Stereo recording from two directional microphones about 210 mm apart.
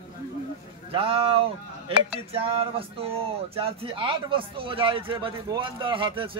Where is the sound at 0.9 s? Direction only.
25° right (ahead or behind).